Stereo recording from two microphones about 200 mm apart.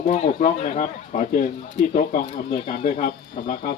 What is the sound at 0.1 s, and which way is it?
Speech, 35° left (ahead or behind).